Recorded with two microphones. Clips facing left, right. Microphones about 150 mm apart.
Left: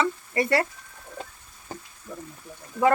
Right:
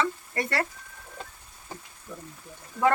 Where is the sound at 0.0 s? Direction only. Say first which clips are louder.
Left 4 dB; 5° left (ahead or behind).